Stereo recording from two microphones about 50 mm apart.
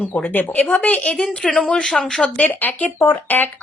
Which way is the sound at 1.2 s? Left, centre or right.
Centre.